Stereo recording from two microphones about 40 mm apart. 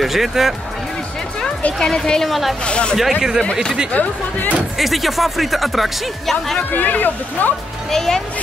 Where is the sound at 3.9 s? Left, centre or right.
Left.